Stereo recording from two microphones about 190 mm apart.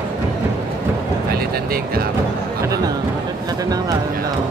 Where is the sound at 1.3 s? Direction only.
50° right (ahead or behind).